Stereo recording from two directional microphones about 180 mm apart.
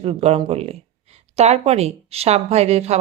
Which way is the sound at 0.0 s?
35° right (ahead or behind).